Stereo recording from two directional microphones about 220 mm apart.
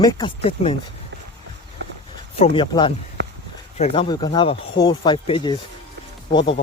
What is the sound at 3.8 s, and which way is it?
Speech, 25° left (ahead or behind).